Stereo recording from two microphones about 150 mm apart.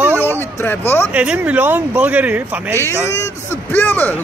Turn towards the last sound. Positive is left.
turn(degrees=10)  # may be behind; listen again after turning